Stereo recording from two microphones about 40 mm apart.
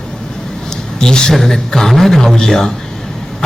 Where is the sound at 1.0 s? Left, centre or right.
Centre.